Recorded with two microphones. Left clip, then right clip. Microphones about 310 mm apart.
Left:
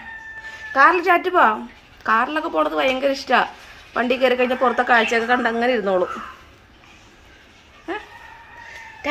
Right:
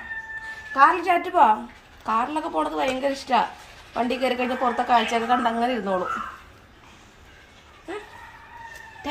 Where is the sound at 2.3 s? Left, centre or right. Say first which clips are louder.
Left 5 dB; centre.